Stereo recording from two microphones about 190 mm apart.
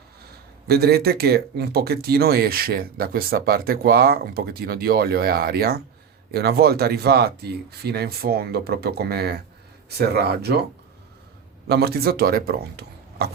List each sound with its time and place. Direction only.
0.7 s speech: 55° right (ahead or behind)
11.7 s speech: 55° right (ahead or behind)